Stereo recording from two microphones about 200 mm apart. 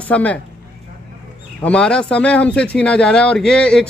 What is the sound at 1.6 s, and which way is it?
A man's voice, 5° left (ahead or behind).